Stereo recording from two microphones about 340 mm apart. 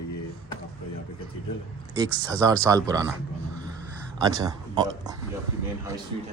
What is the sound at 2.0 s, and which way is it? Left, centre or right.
Speech, centre.